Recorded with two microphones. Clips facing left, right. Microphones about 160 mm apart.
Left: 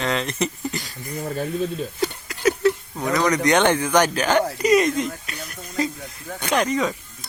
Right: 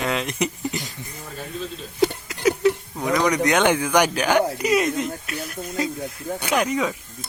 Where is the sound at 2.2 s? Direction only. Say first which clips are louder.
Even; 15° right (ahead or behind).